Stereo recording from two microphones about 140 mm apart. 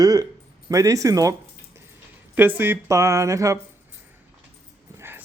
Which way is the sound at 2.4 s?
15° right (ahead or behind).